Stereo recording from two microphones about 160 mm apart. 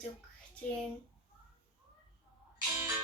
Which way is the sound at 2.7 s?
15° right (ahead or behind).